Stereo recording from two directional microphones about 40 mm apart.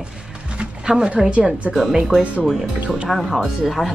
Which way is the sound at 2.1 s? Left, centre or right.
Centre.